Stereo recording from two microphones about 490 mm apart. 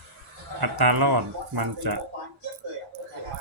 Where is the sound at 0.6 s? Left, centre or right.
Right.